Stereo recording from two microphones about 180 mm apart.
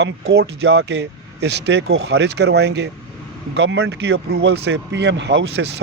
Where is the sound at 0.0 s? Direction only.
80° right.